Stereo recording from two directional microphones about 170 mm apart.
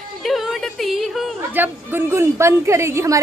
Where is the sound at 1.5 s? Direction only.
10° right (ahead or behind).